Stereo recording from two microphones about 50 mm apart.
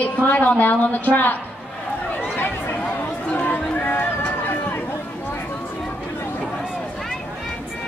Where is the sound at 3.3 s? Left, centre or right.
Left.